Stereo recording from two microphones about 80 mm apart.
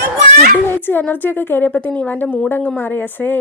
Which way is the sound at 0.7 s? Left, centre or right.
Left.